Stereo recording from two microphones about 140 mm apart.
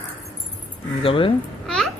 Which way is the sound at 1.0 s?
40° left (ahead or behind).